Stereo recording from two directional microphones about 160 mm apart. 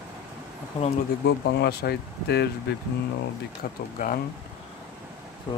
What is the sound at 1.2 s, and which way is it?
Speech, 90° left.